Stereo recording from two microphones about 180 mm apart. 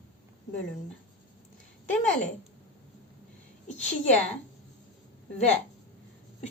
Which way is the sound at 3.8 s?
40° left (ahead or behind).